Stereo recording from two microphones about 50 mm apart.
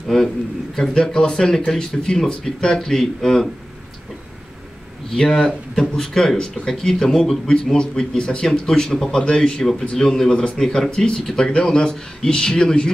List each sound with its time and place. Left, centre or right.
0.1 s speech: centre
5.1 s speech: centre
10.3 s speech: left
10.6 s speech: centre